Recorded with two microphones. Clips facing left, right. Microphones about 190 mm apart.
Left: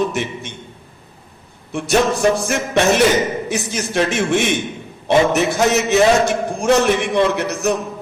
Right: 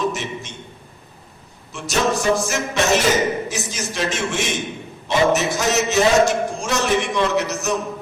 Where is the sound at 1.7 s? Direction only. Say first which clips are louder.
Left 4 dB; 60° left (ahead or behind).